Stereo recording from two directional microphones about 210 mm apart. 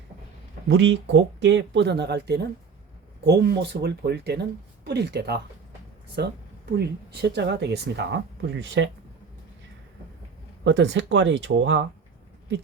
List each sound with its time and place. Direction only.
0.7 s speech: 60° right (ahead or behind)
10.6 s speech: 60° right (ahead or behind)